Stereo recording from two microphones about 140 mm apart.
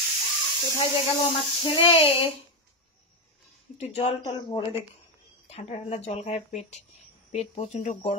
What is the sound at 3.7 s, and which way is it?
Speech, 50° left (ahead or behind).